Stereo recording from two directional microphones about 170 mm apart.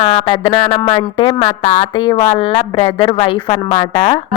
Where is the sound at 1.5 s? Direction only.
40° left (ahead or behind).